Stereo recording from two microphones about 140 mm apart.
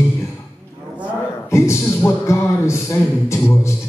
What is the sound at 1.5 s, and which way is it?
A man's voice, 20° left (ahead or behind).